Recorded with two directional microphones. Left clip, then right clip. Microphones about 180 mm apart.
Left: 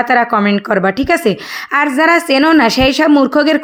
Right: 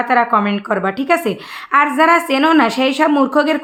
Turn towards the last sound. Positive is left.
turn(degrees=35)  # may be behind; listen again after turning